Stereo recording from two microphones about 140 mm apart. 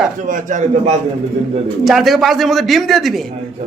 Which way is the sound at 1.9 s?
Centre (ahead or behind).